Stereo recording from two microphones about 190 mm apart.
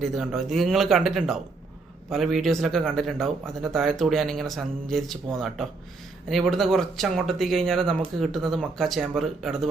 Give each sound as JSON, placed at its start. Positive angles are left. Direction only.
{"t": 0.0, "sound": "speech", "side_deg": 0}